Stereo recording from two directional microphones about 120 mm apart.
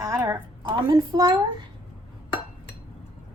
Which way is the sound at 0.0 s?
25° right (ahead or behind).